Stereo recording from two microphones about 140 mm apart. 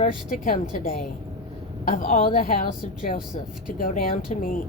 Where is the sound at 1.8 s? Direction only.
70° left (ahead or behind).